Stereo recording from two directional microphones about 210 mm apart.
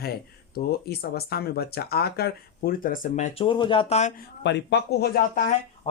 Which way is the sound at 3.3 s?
25° left (ahead or behind).